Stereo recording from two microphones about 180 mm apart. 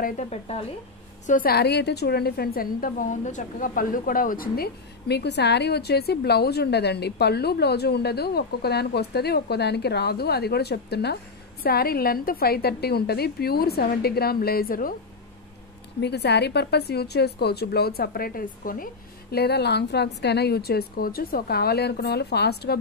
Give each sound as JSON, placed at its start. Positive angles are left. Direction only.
{"t": 0.0, "sound": "a woman's voice", "side_deg": 40}
{"t": 1.2, "sound": "a woman's voice", "side_deg": 50}
{"t": 16.0, "sound": "a woman's voice", "side_deg": 70}
{"t": 19.3, "sound": "a woman's voice", "side_deg": 65}